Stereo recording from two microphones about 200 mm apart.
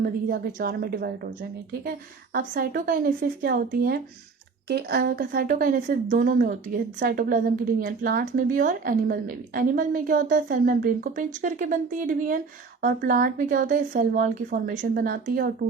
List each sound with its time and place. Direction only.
0.0 s a woman's voice: 50° right (ahead or behind)